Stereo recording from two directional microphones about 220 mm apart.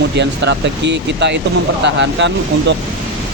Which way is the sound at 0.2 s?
50° right (ahead or behind).